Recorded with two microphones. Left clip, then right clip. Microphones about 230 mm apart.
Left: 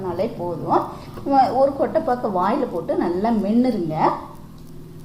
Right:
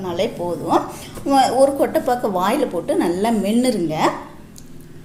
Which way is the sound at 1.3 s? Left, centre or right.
Right.